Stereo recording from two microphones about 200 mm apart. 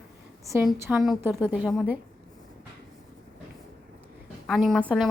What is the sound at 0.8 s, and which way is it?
A woman's voice, 5° right (ahead or behind).